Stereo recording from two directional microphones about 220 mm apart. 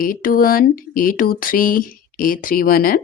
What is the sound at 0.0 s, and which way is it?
Speech, 40° left (ahead or behind).